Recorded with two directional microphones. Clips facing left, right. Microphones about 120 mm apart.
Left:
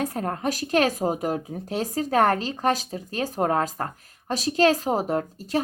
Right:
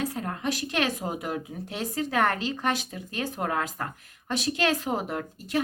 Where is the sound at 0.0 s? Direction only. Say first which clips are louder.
Left 4 dB; 45° left (ahead or behind).